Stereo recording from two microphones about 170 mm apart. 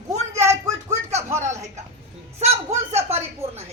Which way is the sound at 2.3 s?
40° right (ahead or behind).